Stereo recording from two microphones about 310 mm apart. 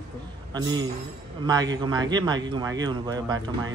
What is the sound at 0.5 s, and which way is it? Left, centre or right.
Speech, centre.